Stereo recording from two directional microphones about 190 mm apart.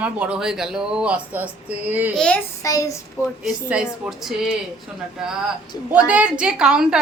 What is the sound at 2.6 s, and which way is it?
Child singing, 15° left (ahead or behind).